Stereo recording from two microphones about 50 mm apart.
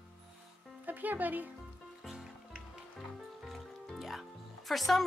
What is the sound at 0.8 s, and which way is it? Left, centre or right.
Speech, right.